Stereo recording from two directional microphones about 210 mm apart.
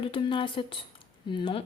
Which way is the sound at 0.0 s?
25° left (ahead or behind).